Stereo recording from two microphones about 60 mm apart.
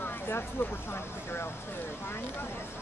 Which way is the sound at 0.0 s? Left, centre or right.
Left.